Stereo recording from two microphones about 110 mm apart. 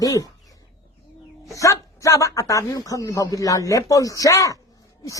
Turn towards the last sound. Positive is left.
turn(degrees=30)  # may be behind; listen again after turning